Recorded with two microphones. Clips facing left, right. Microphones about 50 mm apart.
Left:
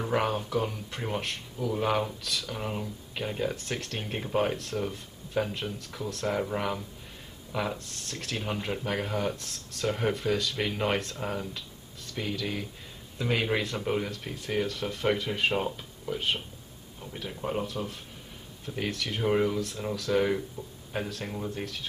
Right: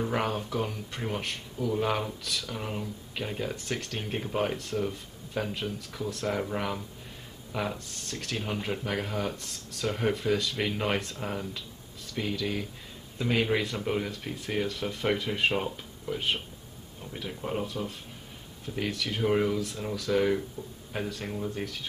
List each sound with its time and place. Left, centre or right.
0.0 s speech: centre
14.7 s speech: centre
15.2 s speech: centre
18.7 s speech: centre